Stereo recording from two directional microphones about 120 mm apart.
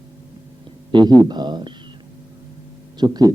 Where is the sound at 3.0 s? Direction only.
35° right (ahead or behind).